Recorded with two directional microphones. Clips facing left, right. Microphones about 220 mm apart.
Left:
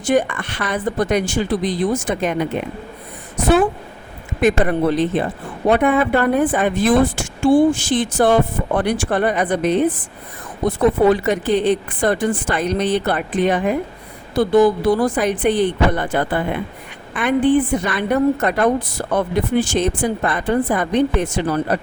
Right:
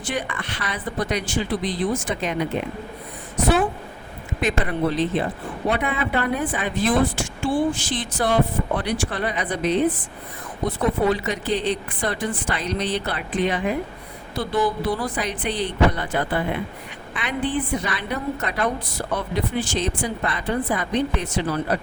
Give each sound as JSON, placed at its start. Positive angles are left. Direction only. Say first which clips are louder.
{"t": 0.0, "sound": "a woman's voice", "louder": "left 10 dB", "side_deg": 45}
{"t": 4.4, "sound": "a woman's voice", "louder": "left 7 dB", "side_deg": 50}
{"t": 11.1, "sound": "a woman's voice", "louder": "left 7 dB", "side_deg": 50}